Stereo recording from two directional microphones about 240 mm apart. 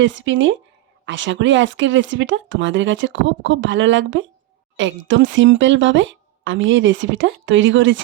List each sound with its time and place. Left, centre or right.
0.0 s speech: right